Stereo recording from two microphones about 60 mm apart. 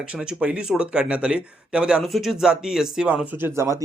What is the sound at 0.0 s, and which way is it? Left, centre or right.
Speech, centre.